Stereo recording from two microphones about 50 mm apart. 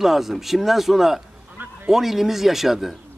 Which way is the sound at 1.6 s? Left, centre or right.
Right.